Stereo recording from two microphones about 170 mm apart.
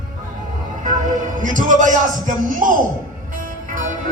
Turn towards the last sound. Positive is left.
turn(degrees=-55)  # may be behind; listen again after turning